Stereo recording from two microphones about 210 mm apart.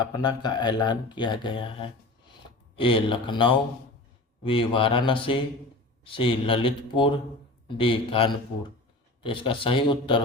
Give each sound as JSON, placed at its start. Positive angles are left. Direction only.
{"t": 0.0, "sound": "speech", "side_deg": 20}